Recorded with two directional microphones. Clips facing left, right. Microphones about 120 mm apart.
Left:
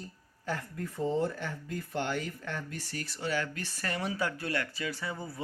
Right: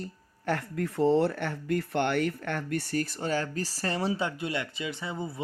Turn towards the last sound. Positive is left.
turn(degrees=-20)  # may be behind; listen again after turning